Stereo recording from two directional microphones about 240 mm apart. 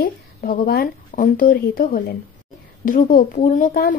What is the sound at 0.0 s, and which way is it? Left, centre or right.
A woman's voice, left.